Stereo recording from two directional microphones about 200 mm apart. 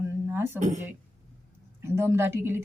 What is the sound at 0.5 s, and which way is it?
Speech, 35° right (ahead or behind).